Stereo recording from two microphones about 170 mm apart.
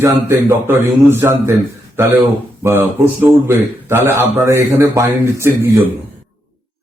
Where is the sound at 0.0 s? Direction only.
15° right (ahead or behind).